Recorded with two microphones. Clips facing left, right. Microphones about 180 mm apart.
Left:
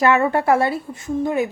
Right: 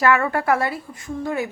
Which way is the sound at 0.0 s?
25° left (ahead or behind).